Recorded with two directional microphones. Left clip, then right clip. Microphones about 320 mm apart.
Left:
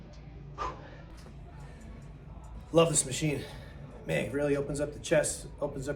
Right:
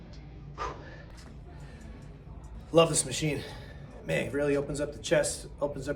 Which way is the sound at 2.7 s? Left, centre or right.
Centre.